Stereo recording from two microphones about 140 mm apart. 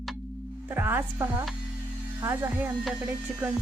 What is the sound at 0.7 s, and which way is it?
A woman's voice, 15° right (ahead or behind).